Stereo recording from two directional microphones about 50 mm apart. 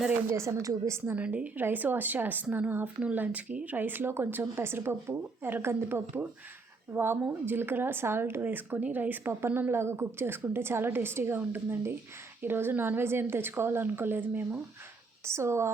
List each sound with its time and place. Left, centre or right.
0.3 s a woman's voice: right
1.1 s speech: right
1.5 s speech: right
3.2 s speech: right
3.8 s a woman's voice: right
9.6 s a woman's voice: right
15.3 s speech: right